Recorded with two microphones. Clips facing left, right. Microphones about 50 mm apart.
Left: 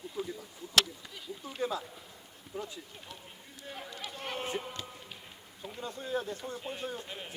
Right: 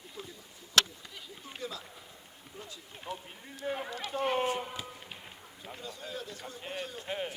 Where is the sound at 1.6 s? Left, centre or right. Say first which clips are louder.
Left 7 dB; left.